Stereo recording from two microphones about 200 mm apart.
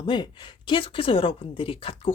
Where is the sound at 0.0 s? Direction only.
25° left (ahead or behind).